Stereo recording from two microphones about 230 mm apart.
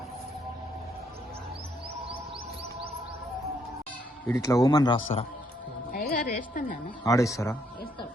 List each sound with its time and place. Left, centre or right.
4.3 s speech: centre
5.9 s a woman's voice: left
7.0 s speech: centre